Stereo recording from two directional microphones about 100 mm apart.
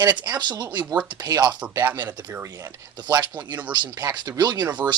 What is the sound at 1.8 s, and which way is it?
Speech, 20° right (ahead or behind).